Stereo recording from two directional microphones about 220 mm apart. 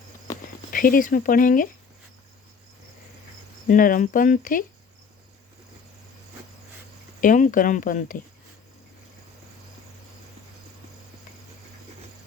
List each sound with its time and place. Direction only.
0.7 s speech: 40° left (ahead or behind)
3.7 s speech: 40° left (ahead or behind)
7.2 s speech: 35° left (ahead or behind)